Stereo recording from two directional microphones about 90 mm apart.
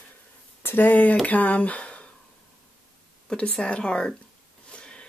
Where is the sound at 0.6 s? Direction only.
25° left (ahead or behind).